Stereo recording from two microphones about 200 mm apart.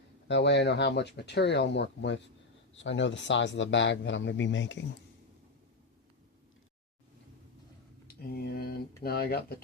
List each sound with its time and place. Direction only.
0.3 s speech: 60° left (ahead or behind)
8.0 s speech: 50° left (ahead or behind)